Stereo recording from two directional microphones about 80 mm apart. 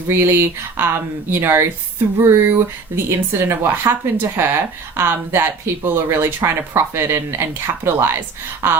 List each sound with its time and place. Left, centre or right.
0.1 s speech: right